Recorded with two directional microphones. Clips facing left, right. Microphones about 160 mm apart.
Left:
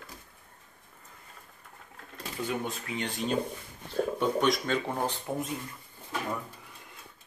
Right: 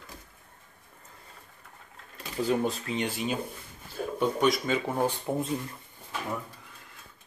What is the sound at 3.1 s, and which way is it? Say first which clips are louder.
Speech: left 1 dB; 5° right (ahead or behind).